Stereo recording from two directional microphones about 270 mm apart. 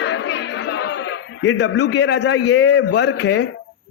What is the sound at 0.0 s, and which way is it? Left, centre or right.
Chatter, left.